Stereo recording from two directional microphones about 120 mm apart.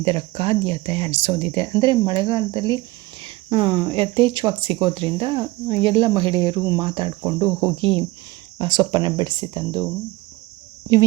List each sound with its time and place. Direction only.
0.0 s speech: 55° right (ahead or behind); by 9.8 s 35° right (ahead or behind)